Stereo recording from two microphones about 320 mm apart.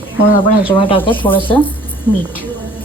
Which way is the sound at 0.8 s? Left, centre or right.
Centre.